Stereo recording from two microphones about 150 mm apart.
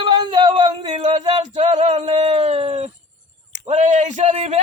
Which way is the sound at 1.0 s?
50° right (ahead or behind).